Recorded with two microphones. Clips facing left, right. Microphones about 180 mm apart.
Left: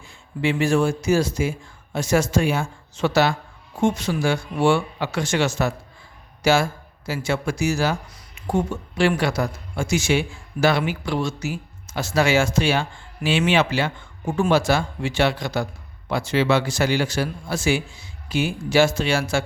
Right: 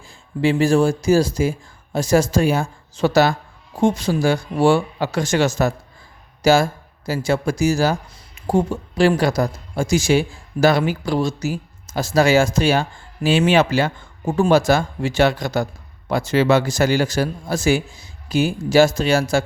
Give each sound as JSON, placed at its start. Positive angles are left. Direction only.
{"t": 0.4, "sound": "speech", "side_deg": -35}